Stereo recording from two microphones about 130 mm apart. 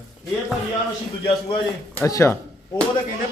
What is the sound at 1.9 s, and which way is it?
Speech, 20° left (ahead or behind).